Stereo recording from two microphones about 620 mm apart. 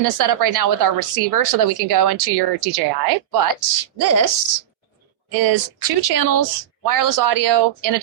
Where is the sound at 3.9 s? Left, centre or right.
Right.